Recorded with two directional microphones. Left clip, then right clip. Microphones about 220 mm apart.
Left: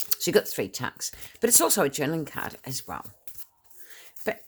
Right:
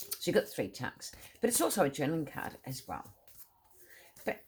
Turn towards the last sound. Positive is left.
turn(degrees=45)  # may be behind; listen again after turning